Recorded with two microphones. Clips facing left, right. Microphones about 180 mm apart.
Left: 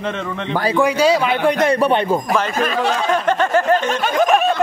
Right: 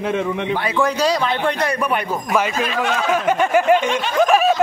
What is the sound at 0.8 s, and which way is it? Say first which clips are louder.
Speech: left 4 dB; 10° left (ahead or behind).